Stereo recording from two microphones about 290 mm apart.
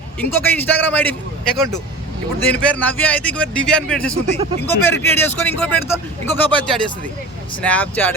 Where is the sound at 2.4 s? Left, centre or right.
Centre.